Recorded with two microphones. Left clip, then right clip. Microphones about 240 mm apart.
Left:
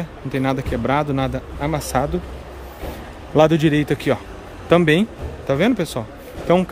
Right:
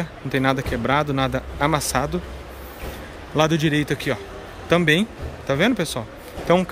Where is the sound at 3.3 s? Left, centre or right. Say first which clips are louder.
Left 5 dB; centre.